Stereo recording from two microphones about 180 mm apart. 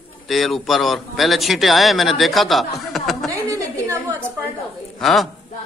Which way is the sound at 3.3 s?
20° right (ahead or behind).